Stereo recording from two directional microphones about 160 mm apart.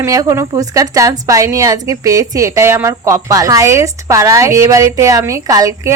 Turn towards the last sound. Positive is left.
turn(degrees=-20)  # may be behind; listen again after turning